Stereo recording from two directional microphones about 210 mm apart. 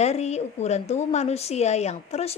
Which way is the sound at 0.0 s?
30° left (ahead or behind).